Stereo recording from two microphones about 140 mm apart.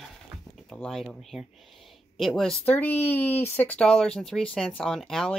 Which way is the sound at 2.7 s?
15° left (ahead or behind).